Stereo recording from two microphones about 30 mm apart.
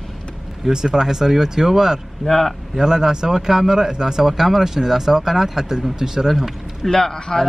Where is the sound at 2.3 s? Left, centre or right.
Centre.